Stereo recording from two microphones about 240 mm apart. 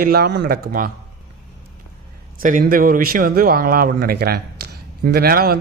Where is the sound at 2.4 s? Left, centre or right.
Right.